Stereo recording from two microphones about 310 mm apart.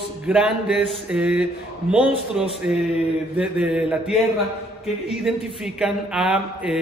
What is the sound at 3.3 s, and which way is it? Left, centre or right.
A man's voice, centre.